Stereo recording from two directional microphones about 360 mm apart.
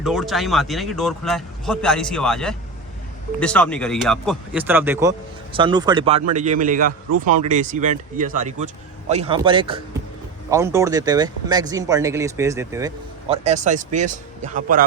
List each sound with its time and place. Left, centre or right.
0.0 s a man's voice: centre; by 14.8 s right